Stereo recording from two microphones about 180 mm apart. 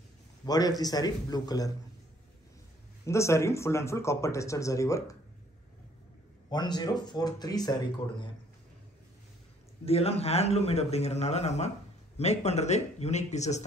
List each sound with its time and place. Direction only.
0.5 s speech: 20° left (ahead or behind)
3.1 s speech: 15° left (ahead or behind)
6.5 s speech: 25° left (ahead or behind)
9.8 s a man's voice: 35° left (ahead or behind)